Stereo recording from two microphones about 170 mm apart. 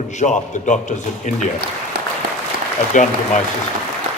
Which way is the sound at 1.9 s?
60° right (ahead or behind).